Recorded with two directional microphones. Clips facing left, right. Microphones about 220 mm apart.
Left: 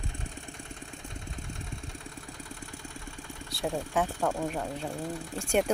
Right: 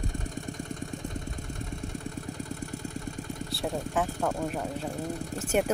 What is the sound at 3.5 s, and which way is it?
Speech, centre (ahead or behind).